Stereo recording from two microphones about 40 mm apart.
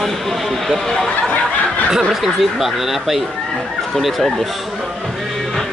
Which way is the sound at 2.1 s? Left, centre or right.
Centre.